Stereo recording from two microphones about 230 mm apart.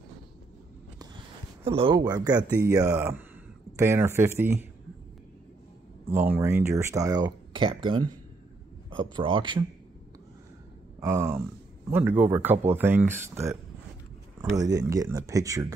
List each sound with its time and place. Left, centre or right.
0.9 s a sound: right
2.6 s speech: centre
6.0 s speech: centre
11.0 s speech: centre